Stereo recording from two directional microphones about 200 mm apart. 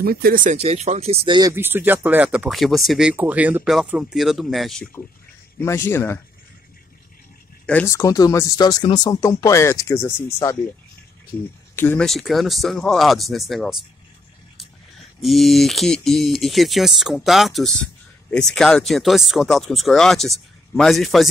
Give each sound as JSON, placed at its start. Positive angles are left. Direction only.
{"t": 0.0, "sound": "speech", "side_deg": -50}
{"t": 1.5, "sound": "speech", "side_deg": -10}
{"t": 5.6, "sound": "speech", "side_deg": 15}
{"t": 7.6, "sound": "speech", "side_deg": 10}
{"t": 11.7, "sound": "speech", "side_deg": 10}
{"t": 15.2, "sound": "speech", "side_deg": 0}